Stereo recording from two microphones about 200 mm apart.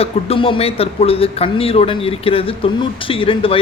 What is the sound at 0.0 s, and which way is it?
A man's voice, 30° left (ahead or behind).